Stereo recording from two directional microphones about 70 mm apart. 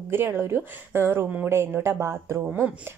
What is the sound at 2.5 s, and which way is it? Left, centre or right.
Speech, right.